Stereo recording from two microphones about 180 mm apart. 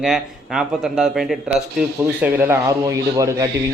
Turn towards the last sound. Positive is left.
turn(degrees=-20)  # may be behind; listen again after turning